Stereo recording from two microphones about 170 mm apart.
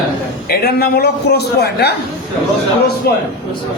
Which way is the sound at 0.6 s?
60° left (ahead or behind).